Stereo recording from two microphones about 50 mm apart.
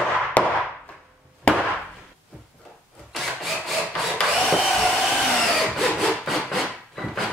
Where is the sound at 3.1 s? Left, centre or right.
Centre.